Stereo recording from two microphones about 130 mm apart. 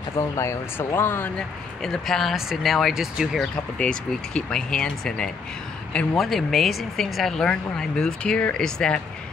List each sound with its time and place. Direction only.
0.4 s speech: 20° left (ahead or behind)
1.8 s speech: 5° left (ahead or behind)
3.5 s speech: 5° left (ahead or behind)